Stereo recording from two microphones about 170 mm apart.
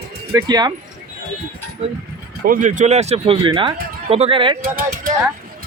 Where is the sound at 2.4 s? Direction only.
50° right (ahead or behind); by 4.6 s 30° right (ahead or behind).